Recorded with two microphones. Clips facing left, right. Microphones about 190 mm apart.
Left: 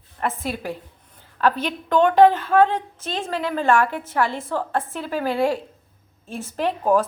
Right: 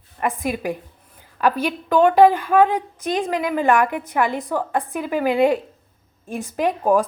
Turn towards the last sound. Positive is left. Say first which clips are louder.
# right 2 dB
turn(degrees=-15)  # may be behind; listen again after turning